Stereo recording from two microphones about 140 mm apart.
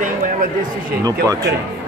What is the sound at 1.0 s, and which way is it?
Speech, 25° right (ahead or behind).